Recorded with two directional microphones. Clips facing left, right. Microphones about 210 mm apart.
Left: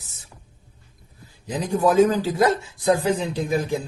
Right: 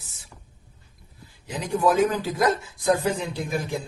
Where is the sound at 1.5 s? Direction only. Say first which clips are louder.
Left 2 dB; 35° left (ahead or behind).